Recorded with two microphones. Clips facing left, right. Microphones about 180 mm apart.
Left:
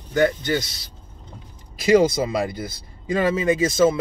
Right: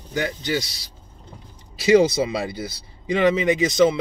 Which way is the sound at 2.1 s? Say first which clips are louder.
Left 1 dB; 45° left (ahead or behind).